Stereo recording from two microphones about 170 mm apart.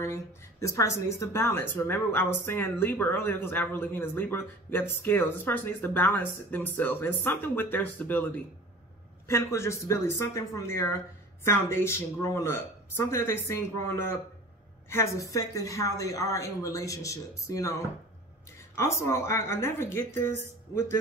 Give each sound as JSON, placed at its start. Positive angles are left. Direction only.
{"t": 0.0, "sound": "speech", "side_deg": 15}
{"t": 9.3, "sound": "a woman's voice", "side_deg": 15}
{"t": 18.8, "sound": "speech", "side_deg": 15}